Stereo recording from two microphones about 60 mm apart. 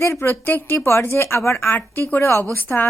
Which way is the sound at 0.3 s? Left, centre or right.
Left.